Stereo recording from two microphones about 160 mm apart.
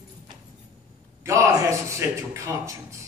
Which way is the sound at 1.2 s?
20° right (ahead or behind).